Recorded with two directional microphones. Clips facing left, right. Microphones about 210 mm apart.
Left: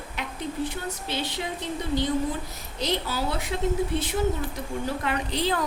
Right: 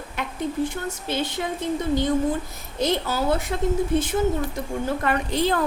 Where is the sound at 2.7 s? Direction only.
50° right (ahead or behind).